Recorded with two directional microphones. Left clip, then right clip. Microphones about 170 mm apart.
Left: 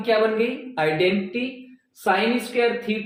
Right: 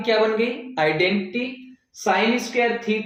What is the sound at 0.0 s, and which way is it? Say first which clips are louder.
Speech: even; 25° right (ahead or behind).